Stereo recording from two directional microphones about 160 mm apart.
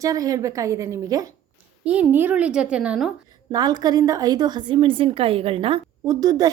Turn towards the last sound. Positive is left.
turn(degrees=-25)  # may be behind; listen again after turning